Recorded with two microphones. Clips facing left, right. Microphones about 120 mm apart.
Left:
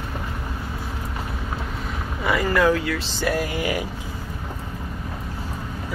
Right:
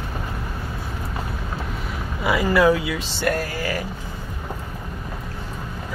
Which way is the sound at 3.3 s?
15° left (ahead or behind).